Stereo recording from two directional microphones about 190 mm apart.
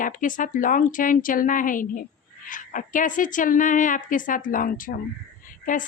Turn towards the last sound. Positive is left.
turn(degrees=45)  # may be behind; listen again after turning